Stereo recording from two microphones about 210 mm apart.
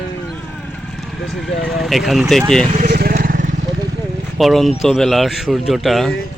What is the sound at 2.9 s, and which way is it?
Vehicle, 45° right (ahead or behind).